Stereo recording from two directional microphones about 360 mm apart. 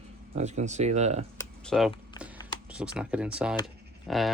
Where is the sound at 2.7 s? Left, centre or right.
Centre.